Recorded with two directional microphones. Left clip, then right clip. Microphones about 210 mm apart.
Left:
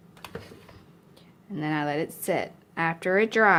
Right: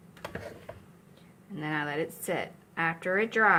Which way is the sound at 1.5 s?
30° left (ahead or behind).